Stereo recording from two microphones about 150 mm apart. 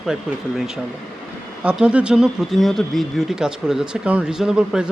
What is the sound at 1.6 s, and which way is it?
Speech, 5° right (ahead or behind).